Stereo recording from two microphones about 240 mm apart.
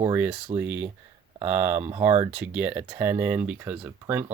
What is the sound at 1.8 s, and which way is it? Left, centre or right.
Speech, right.